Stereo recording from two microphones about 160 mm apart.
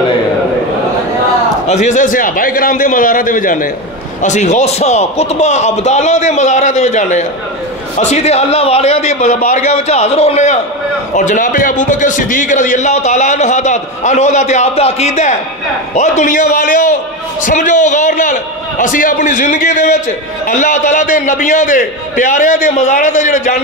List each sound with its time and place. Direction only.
1.7 s a man's voice: 50° left (ahead or behind)
4.2 s a man's voice: 45° left (ahead or behind)